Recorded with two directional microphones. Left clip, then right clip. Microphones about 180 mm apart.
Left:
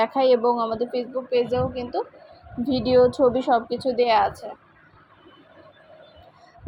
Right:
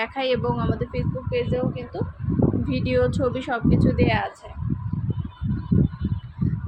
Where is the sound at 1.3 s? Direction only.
25° left (ahead or behind).